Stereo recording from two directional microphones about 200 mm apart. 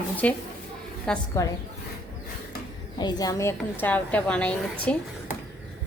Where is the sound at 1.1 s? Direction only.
5° left (ahead or behind).